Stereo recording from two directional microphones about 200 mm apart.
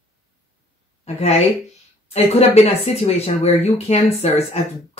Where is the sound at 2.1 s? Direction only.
30° left (ahead or behind).